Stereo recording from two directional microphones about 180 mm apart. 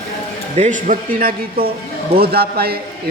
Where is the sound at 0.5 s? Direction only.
40° right (ahead or behind).